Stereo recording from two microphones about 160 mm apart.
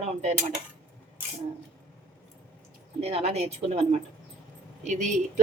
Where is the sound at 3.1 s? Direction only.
40° right (ahead or behind).